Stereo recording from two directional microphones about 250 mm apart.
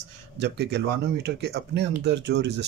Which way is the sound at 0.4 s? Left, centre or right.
Right.